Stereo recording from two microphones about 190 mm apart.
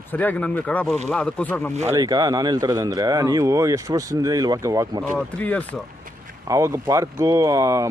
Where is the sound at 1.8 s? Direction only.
15° right (ahead or behind).